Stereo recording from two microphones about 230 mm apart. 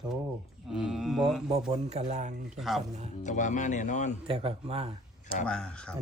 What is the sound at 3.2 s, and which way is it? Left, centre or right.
Speech, left.